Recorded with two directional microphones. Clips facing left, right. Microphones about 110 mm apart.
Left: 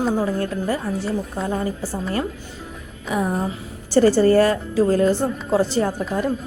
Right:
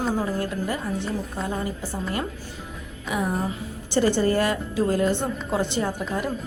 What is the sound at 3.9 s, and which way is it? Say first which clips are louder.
A woman's voice: left 7 dB; 40° left (ahead or behind).